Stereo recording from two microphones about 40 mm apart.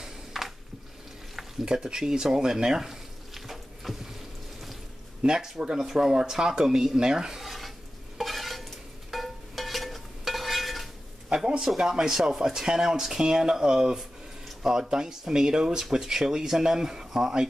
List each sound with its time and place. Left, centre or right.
0.0 s a sound: centre
1.6 s frying: centre
5.2 s speech: centre
7.4 s stir: centre
11.3 s speech: centre